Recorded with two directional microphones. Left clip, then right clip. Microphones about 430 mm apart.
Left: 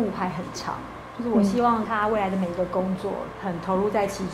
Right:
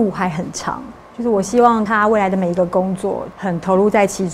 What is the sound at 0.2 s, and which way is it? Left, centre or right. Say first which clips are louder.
Speech: right 8 dB; right.